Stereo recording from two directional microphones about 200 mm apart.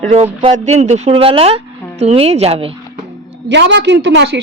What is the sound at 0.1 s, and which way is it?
Speech, 30° right (ahead or behind).